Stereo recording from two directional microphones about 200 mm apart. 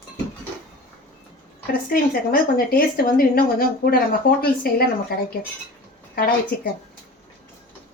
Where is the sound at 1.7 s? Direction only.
45° left (ahead or behind).